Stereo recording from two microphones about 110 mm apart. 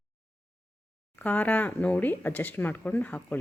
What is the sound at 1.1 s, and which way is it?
A woman's voice, 15° left (ahead or behind).